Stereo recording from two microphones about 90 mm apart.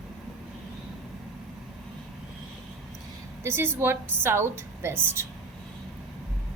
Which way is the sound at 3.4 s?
25° right (ahead or behind).